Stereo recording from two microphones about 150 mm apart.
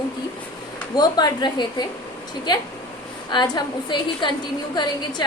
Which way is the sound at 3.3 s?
30° left (ahead or behind).